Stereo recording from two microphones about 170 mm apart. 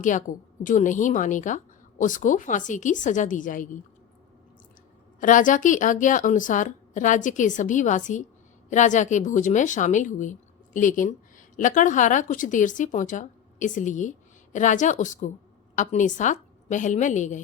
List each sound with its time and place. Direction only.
0.0 s a woman's voice: 50° left (ahead or behind)
5.2 s a woman's voice: 50° left (ahead or behind)